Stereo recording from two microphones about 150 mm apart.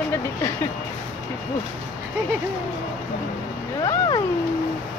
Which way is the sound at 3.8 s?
25° left (ahead or behind).